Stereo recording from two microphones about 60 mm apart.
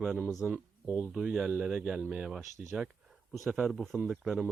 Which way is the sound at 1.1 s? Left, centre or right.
Centre.